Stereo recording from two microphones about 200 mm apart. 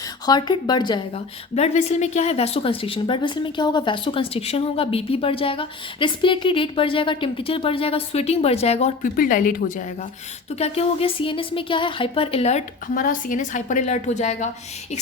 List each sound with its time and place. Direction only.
0.3 s a woman's voice: 20° left (ahead or behind)
9.1 s a woman's voice: 45° left (ahead or behind)
12.9 s a woman's voice: 40° left (ahead or behind)